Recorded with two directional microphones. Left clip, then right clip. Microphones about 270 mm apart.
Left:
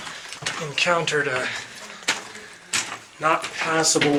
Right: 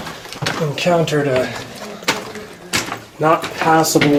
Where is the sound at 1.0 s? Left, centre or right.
Centre.